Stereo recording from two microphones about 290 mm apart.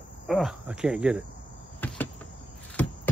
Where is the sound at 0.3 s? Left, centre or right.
Centre.